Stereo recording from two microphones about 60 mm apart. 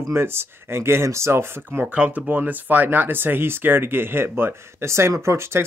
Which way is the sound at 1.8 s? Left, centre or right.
Right.